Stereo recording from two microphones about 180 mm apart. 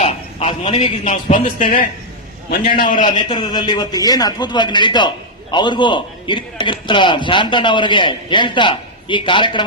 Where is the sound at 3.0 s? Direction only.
25° left (ahead or behind).